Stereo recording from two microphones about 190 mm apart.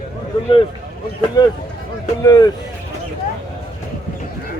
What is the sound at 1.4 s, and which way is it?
A man's voice, 20° left (ahead or behind).